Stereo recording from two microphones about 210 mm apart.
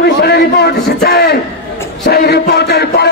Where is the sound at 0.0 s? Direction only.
50° left (ahead or behind).